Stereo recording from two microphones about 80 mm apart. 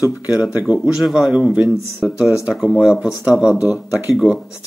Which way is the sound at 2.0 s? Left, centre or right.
Centre.